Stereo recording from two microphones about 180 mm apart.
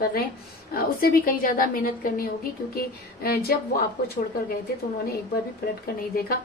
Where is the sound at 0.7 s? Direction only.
55° left (ahead or behind).